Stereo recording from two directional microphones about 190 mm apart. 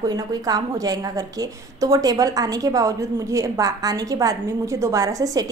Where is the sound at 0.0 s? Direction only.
20° right (ahead or behind).